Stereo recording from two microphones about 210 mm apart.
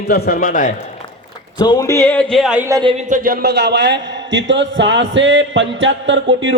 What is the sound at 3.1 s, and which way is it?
A man's voice, 45° right (ahead or behind).